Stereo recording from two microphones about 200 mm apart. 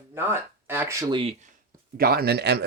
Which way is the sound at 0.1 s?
10° right (ahead or behind).